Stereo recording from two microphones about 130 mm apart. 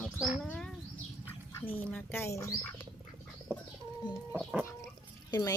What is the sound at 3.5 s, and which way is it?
Bird, 15° right (ahead or behind).